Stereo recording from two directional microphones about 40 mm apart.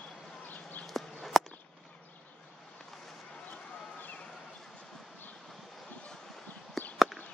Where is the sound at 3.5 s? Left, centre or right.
Left.